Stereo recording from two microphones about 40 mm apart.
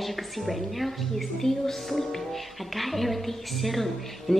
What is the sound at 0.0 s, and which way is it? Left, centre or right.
A woman's voice, centre.